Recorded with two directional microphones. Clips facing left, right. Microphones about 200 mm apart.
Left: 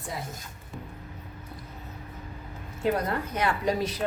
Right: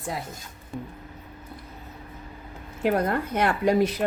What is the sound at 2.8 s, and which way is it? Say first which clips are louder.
Speech: right 3 dB; 55° right (ahead or behind).